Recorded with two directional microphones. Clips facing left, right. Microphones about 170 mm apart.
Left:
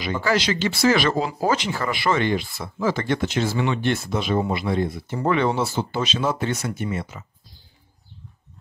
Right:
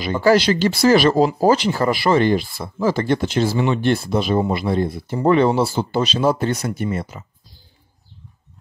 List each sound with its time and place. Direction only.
0.0 s speech: 35° right (ahead or behind)